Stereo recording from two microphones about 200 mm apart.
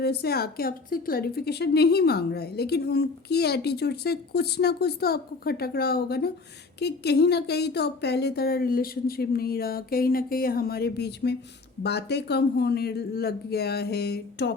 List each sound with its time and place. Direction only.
0.0 s a woman's voice: 50° left (ahead or behind)